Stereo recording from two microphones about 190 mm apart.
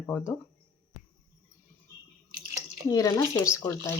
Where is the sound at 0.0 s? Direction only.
10° left (ahead or behind).